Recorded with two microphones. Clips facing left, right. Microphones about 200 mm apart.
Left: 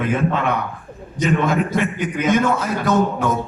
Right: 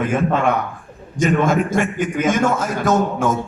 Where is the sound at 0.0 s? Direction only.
50° right (ahead or behind).